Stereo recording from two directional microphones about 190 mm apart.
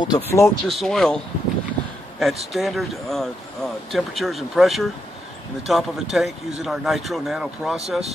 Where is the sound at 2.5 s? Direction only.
Centre (ahead or behind).